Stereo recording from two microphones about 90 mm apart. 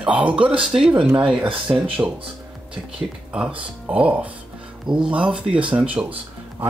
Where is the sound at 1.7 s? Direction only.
20° right (ahead or behind).